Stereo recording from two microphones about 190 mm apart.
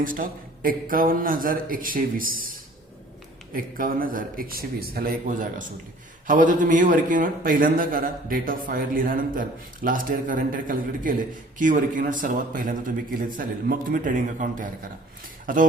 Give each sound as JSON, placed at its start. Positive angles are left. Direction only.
{"t": 0.0, "sound": "a man's voice", "side_deg": -45}